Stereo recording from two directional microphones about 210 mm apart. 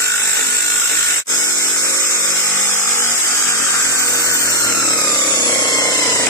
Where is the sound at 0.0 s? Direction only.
15° left (ahead or behind).